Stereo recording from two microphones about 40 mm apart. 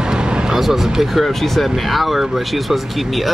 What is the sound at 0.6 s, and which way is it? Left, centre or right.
Speech, centre.